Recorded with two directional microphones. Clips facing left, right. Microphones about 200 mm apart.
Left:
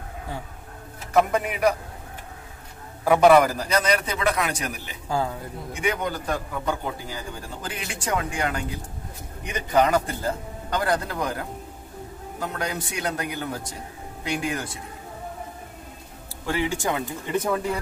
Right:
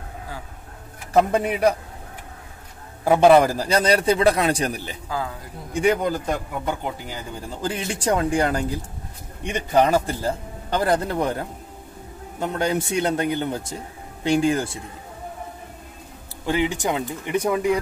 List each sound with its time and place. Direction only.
1.1 s a man's voice: 30° right (ahead or behind)
3.1 s a man's voice: 30° right (ahead or behind)
7.6 s a man's voice: 30° right (ahead or behind)
16.4 s speech: 20° right (ahead or behind)